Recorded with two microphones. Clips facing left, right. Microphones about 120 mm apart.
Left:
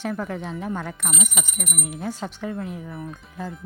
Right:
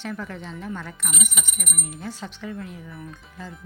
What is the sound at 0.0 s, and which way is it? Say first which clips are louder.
Speech: left 5 dB; 45° left (ahead or behind).